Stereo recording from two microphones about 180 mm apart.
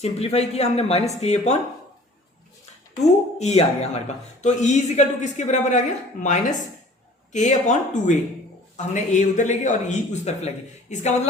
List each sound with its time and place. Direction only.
0.0 s speech: 35° left (ahead or behind)
3.0 s speech: 40° left (ahead or behind)